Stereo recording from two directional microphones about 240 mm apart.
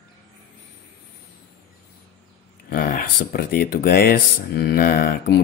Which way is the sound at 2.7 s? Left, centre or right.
Left.